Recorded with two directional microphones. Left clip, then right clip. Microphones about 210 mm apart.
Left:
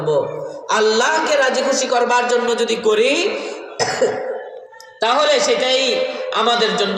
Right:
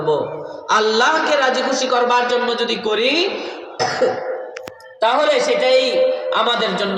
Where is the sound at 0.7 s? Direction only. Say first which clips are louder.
Right 1 dB; 15° left (ahead or behind).